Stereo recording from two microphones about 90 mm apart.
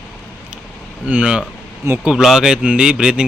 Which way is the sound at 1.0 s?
15° right (ahead or behind).